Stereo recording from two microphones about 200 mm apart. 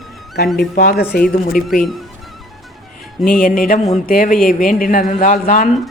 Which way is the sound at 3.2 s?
45° left (ahead or behind).